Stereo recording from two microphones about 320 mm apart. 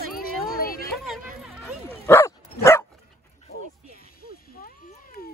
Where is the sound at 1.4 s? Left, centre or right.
Centre.